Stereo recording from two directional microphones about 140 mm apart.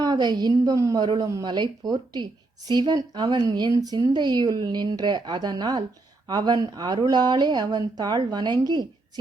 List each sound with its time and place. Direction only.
0.0 s speech: 30° right (ahead or behind)